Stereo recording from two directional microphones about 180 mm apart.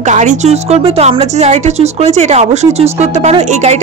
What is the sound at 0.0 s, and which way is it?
A woman's voice, 40° right (ahead or behind).